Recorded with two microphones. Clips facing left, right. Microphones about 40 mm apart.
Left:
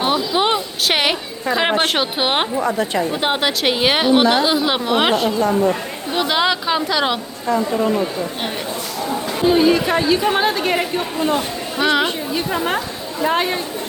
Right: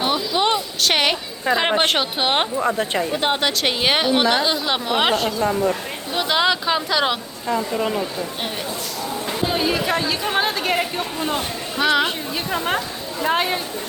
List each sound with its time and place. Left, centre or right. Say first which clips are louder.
0.0 s a sound: left 2 dB; centre
1.5 s a woman's voice: left 2 dB; centre
2.6 s a woman's voice: left 2 dB; right
3.1 s a woman's voice: left 1 dB; centre
9.3 s a woman's voice: left 7 dB; centre